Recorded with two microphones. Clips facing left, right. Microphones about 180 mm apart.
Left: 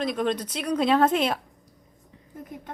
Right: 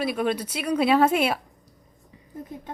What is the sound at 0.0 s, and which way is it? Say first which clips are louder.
A woman's voice: right 1 dB; 10° right (ahead or behind).